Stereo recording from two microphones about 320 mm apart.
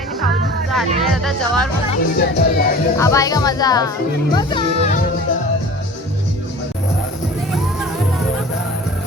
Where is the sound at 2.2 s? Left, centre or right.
Left.